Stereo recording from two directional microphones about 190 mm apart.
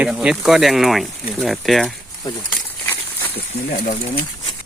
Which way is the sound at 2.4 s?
10° left (ahead or behind).